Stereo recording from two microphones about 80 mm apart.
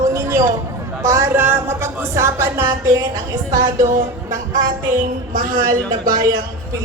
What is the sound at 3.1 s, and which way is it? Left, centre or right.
Speech, right.